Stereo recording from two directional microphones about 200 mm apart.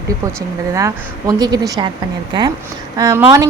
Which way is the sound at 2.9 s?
15° right (ahead or behind).